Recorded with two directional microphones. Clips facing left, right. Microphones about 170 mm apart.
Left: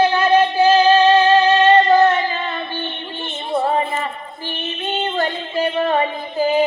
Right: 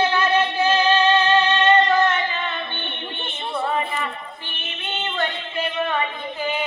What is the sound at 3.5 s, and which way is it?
Child singing, 35° left (ahead or behind).